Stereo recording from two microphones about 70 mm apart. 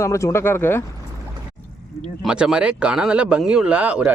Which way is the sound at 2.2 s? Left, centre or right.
Centre.